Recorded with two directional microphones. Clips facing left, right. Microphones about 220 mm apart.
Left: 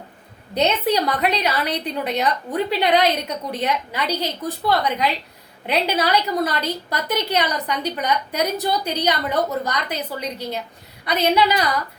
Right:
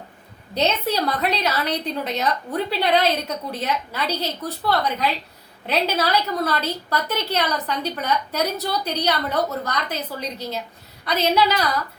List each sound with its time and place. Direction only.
0.5 s a woman's voice: 15° left (ahead or behind)